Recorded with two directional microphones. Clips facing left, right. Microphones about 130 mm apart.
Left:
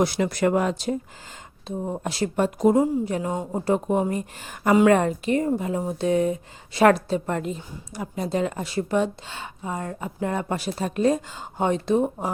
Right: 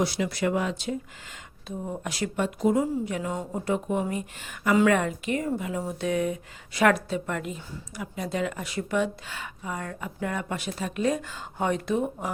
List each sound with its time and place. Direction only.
0.0 s speech: 50° left (ahead or behind)
1.6 s a woman's voice: 30° left (ahead or behind)
2.8 s a woman's voice: 30° left (ahead or behind)
11.3 s speech: 25° left (ahead or behind)